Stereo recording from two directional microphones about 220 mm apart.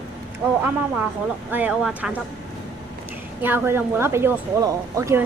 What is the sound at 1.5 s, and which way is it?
Speech, 5° right (ahead or behind).